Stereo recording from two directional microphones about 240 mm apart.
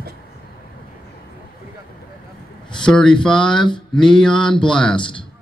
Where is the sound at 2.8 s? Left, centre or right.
Centre.